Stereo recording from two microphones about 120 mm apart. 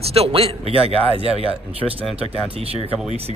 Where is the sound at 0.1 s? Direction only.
55° right (ahead or behind).